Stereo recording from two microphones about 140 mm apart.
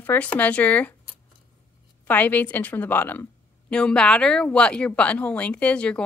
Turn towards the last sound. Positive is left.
turn(degrees=10)  # may be behind; listen again after turning